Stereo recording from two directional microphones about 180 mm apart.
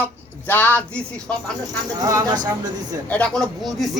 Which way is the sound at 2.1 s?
20° right (ahead or behind).